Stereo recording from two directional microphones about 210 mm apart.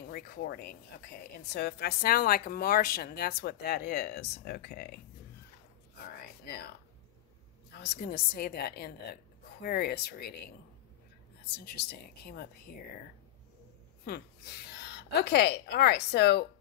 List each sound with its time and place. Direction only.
0.1 s a woman's voice: 45° left (ahead or behind)
7.8 s a woman's voice: 45° left (ahead or behind)
11.5 s a woman's voice: 50° left (ahead or behind)
14.0 s a woman's voice: 50° left (ahead or behind)